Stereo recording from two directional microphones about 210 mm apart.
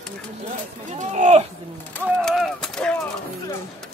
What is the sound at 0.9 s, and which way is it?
Speech, 35° right (ahead or behind).